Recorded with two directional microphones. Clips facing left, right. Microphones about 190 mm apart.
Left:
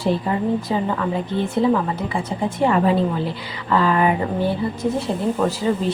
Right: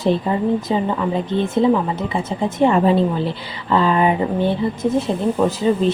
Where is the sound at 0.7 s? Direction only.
20° right (ahead or behind).